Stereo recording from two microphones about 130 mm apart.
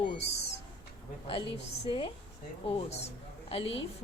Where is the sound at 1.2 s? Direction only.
45° left (ahead or behind).